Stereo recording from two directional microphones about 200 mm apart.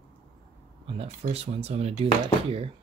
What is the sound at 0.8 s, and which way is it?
Speech, 30° right (ahead or behind).